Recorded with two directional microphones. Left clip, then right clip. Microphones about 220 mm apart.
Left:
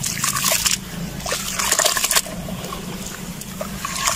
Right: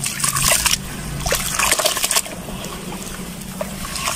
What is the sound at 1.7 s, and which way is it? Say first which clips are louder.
Liquid: even; 5° right (ahead or behind).